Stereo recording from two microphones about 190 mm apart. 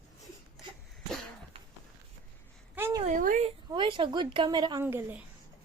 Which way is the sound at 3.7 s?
25° right (ahead or behind).